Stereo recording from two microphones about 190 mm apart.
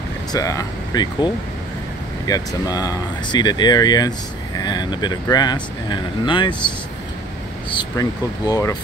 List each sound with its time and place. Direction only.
0.3 s speech: 15° left (ahead or behind)
7.7 s speech: 20° left (ahead or behind)